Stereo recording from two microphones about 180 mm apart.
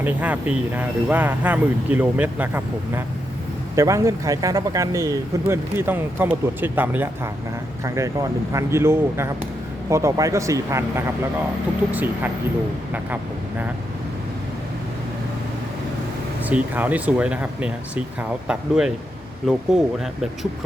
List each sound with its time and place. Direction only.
0.0 s speech: 10° right (ahead or behind)
16.4 s speech: 10° right (ahead or behind)